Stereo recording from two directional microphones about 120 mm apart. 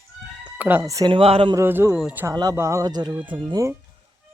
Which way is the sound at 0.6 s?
15° right (ahead or behind).